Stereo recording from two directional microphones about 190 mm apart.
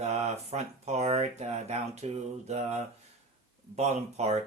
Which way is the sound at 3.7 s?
35° right (ahead or behind).